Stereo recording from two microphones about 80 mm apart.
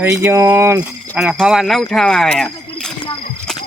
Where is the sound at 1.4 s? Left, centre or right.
Centre.